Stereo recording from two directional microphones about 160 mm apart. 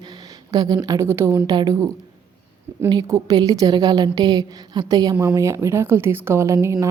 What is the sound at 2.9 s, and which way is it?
A woman's voice, 20° right (ahead or behind).